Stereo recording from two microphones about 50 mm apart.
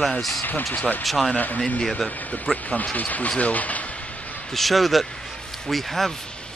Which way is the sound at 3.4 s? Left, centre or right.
Left.